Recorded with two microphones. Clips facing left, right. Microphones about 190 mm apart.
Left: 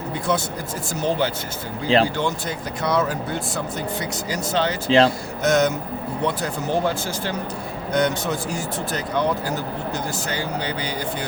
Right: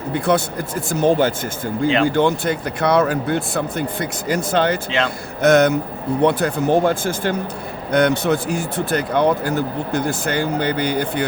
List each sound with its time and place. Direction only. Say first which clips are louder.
0.1 s speech: right 6 dB; 60° right (ahead or behind)
4.9 s speech: left 6 dB; 35° left (ahead or behind)
5.4 s speech: right 6 dB; 60° right (ahead or behind)